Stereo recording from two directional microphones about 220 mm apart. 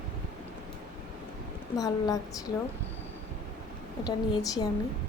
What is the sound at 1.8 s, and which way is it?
Speech, 15° left (ahead or behind).